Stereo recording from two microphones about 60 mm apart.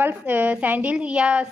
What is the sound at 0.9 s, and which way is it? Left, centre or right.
Speech, centre.